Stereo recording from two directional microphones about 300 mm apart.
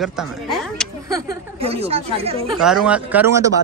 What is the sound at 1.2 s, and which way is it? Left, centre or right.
Speech, centre.